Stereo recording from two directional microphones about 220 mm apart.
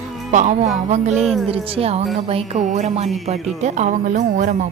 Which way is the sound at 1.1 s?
Centre (ahead or behind).